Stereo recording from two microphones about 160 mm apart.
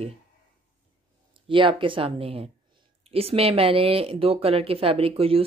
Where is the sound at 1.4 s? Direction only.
30° right (ahead or behind).